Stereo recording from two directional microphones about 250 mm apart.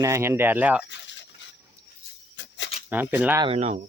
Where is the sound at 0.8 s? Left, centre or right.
Left.